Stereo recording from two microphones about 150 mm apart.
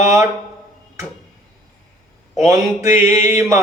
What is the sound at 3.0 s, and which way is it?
Mantra, 20° right (ahead or behind).